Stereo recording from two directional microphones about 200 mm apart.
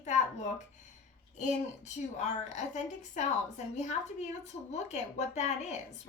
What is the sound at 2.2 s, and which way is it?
A woman's voice, 35° left (ahead or behind).